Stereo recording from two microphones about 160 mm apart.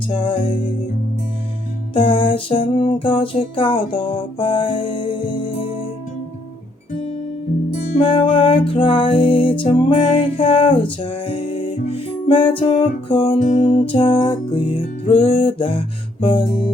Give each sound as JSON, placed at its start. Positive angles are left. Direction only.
{"t": 0.1, "sound": "music", "side_deg": 35}
{"t": 1.9, "sound": "music", "side_deg": 35}
{"t": 8.0, "sound": "music", "side_deg": 30}
{"t": 13.4, "sound": "music", "side_deg": 50}
{"t": 13.7, "sound": "music", "side_deg": 30}